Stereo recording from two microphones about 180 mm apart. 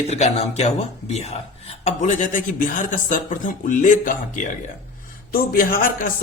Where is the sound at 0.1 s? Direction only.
35° left (ahead or behind).